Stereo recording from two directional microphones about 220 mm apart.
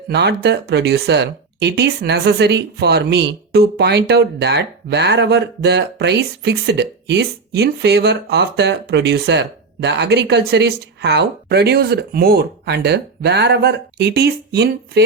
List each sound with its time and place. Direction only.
0.1 s speech: 50° right (ahead or behind)